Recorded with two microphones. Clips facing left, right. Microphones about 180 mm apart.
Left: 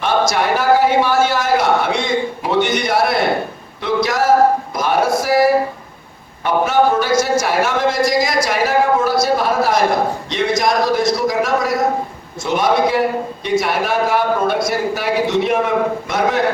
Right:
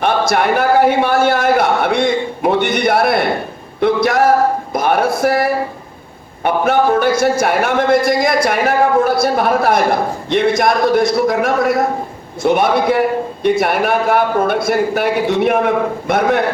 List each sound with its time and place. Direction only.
0.0 s a man's voice: 60° right (ahead or behind)
3.8 s a sound: 55° right (ahead or behind)
10.2 s speech: 55° right (ahead or behind)